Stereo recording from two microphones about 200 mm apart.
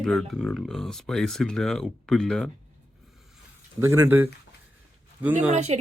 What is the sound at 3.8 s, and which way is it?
Speech, 15° right (ahead or behind).